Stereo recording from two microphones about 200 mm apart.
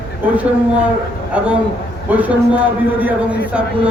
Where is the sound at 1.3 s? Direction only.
5° right (ahead or behind).